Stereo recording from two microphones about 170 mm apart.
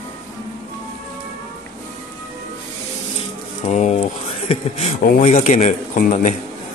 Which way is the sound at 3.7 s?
45° left (ahead or behind).